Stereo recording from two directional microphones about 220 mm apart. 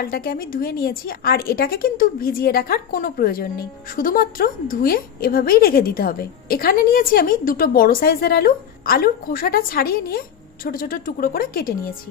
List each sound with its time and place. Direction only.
0.0 s a woman's voice: 40° left (ahead or behind)